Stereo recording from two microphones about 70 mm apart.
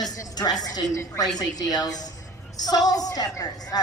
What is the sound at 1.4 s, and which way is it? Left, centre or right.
A woman's voice, left.